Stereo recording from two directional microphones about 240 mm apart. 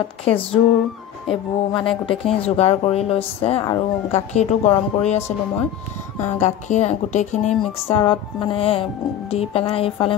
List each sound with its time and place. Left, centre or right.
0.2 s speech: left
1.7 s speech: left
6.2 s speech: left